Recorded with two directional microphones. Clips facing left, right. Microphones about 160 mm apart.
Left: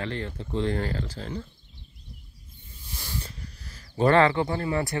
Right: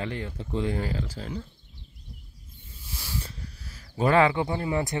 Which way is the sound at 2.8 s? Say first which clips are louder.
Even; 5° right (ahead or behind).